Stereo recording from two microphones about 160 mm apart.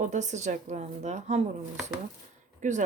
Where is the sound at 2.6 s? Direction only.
50° right (ahead or behind).